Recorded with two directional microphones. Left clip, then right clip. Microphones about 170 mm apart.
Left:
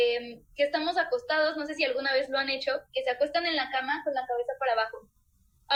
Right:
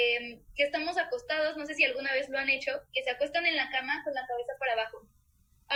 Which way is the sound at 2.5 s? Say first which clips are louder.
Even; 30° right (ahead or behind).